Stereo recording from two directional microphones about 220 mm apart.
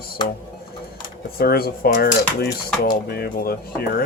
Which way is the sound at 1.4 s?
45° left (ahead or behind).